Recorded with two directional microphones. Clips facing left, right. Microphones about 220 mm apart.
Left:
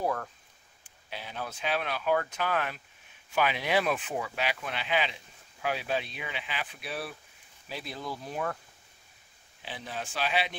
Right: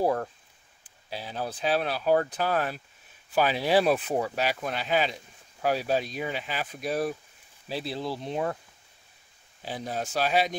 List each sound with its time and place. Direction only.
0.0 s speech: 35° right (ahead or behind)
9.6 s speech: 40° right (ahead or behind)